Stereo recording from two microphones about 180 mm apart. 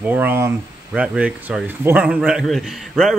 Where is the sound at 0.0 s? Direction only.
10° right (ahead or behind).